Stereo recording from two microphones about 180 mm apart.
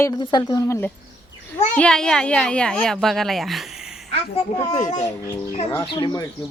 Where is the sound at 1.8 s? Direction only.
5° left (ahead or behind).